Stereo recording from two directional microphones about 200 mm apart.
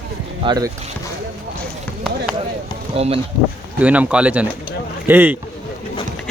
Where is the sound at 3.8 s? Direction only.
5° right (ahead or behind).